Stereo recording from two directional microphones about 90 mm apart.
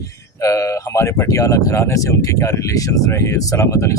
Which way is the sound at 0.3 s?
35° left (ahead or behind).